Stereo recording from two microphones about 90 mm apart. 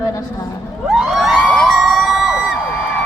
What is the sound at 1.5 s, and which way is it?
Emergency vehicle, centre (ahead or behind).